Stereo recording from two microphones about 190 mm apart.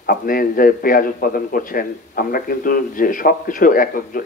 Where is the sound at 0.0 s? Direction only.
50° left (ahead or behind).